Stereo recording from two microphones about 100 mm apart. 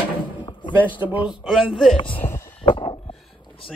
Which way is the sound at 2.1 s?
20° left (ahead or behind).